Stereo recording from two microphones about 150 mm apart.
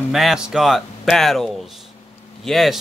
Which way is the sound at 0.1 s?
Centre (ahead or behind).